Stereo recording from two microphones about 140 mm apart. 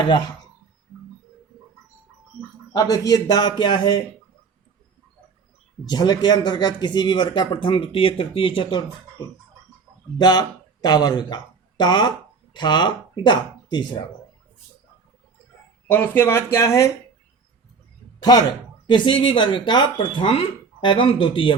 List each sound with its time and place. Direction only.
2.7 s a man's voice: 25° left (ahead or behind)
5.8 s speech: 30° left (ahead or behind)
10.2 s speech: 30° left (ahead or behind)
15.9 s speech: 15° left (ahead or behind)
18.2 s speech: 30° left (ahead or behind)